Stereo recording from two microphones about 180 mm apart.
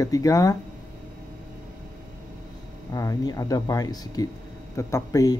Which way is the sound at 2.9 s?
20° left (ahead or behind).